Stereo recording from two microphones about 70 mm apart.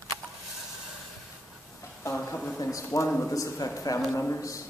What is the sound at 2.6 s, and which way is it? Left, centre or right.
A man's voice, left.